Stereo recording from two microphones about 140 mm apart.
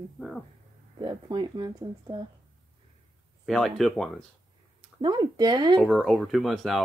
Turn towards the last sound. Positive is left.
turn(degrees=0)  # may be behind; listen again after turning